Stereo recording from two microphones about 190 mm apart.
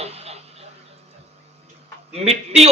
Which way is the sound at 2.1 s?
35° right (ahead or behind).